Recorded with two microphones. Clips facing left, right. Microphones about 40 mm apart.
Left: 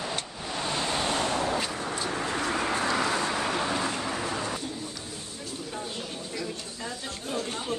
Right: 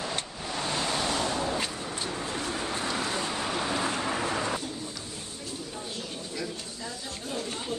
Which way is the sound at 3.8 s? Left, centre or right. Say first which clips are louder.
Right 1 dB; centre.